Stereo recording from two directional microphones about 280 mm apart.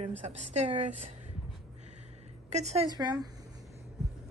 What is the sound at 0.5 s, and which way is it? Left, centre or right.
Speech, right.